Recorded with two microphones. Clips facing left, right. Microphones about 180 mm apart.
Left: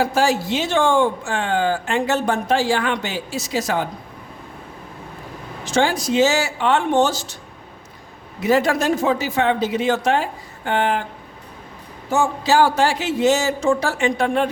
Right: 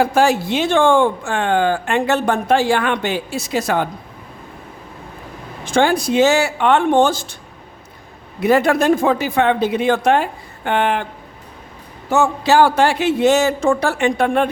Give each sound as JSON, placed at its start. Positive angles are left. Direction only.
{"t": 0.0, "sound": "speech", "side_deg": -60}
{"t": 5.6, "sound": "speech", "side_deg": -55}
{"t": 8.4, "sound": "speech", "side_deg": -60}
{"t": 12.1, "sound": "speech", "side_deg": -65}